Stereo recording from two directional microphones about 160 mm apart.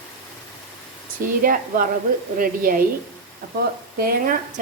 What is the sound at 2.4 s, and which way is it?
A woman's voice, 65° right (ahead or behind).